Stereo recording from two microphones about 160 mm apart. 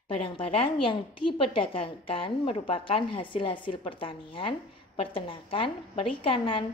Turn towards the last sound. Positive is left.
turn(degrees=35)  # may be behind; listen again after turning